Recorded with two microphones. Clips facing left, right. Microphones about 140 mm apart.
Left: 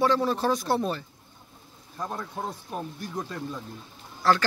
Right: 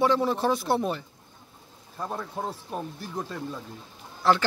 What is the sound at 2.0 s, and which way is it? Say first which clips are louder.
Speech: right 1 dB; 5° right (ahead or behind).